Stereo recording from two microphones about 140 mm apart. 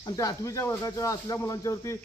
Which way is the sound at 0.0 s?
25° left (ahead or behind).